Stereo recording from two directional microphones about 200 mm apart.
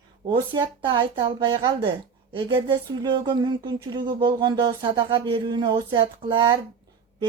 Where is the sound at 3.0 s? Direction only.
25° right (ahead or behind).